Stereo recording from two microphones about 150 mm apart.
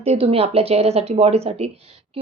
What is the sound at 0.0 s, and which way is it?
A woman's voice, 40° right (ahead or behind).